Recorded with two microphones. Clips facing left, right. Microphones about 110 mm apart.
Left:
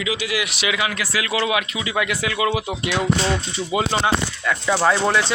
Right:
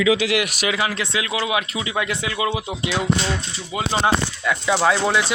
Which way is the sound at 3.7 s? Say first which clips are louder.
Left 4 dB; 5° left (ahead or behind).